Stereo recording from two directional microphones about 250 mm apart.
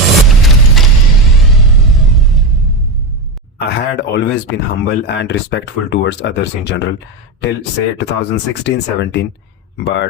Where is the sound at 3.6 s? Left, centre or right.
Left.